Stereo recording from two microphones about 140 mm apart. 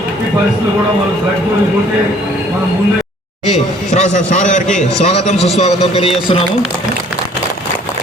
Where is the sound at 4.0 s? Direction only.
60° left (ahead or behind).